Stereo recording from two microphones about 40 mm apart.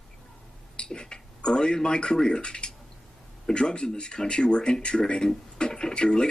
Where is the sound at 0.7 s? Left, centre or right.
Left.